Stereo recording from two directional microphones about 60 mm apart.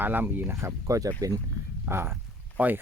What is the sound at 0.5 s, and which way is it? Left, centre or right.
Speech, right.